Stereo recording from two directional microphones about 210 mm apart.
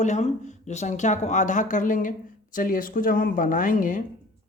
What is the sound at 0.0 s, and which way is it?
Speech, 35° left (ahead or behind).